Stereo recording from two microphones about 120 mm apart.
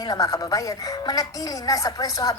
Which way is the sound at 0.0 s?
30° left (ahead or behind).